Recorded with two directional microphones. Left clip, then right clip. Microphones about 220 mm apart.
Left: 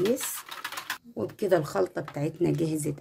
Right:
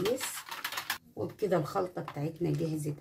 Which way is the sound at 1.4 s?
55° left (ahead or behind).